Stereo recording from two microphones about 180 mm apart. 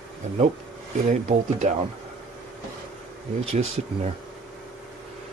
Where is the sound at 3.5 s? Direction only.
35° right (ahead or behind).